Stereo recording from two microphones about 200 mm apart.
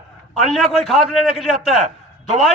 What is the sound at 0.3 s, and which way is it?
A man's voice, centre (ahead or behind).